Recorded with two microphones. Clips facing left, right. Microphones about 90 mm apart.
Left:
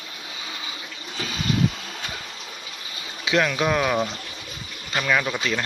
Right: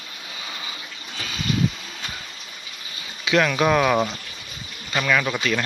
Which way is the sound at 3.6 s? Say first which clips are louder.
Right 3 dB; 5° left (ahead or behind).